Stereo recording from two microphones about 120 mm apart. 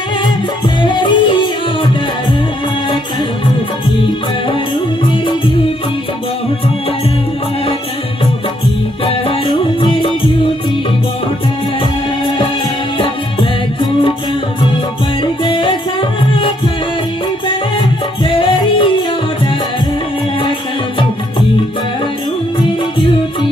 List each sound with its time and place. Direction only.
0.8 s music: 40° left (ahead or behind)
9.0 s music: 45° left (ahead or behind)
15.4 s music: 45° left (ahead or behind)
18.2 s music: 45° left (ahead or behind)